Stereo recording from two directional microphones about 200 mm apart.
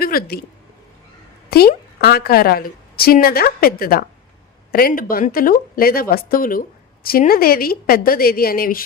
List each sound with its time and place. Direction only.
0.0 s speech: 50° left (ahead or behind)
1.5 s a woman's voice: 50° left (ahead or behind)